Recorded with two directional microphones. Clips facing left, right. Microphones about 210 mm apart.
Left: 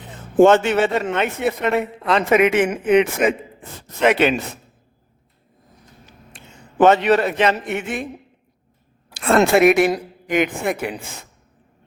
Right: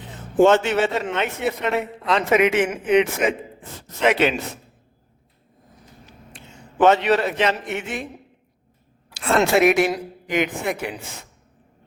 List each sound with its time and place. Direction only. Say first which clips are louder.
0.3 s a man's voice: left 3 dB; 55° left (ahead or behind)
6.7 s a man's voice: left 3 dB; 50° left (ahead or behind)
9.1 s a woman's voice: left 3 dB; 55° left (ahead or behind)